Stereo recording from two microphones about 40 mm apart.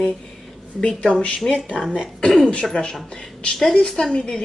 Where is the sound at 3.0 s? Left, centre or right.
Left.